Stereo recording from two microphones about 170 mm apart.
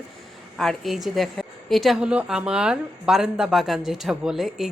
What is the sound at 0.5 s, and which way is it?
A woman's voice, centre (ahead or behind).